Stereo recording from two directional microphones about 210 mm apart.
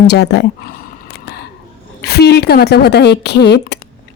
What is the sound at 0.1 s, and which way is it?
Speech, 55° left (ahead or behind).